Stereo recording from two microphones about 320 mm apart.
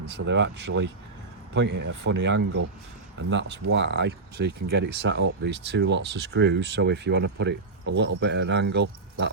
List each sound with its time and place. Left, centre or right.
0.0 s speech: right
1.9 s speech: right